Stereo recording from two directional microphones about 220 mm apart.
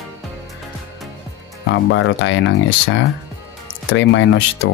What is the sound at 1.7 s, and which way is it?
Speech, 60° left (ahead or behind).